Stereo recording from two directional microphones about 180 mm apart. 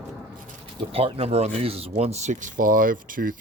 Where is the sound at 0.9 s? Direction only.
30° right (ahead or behind).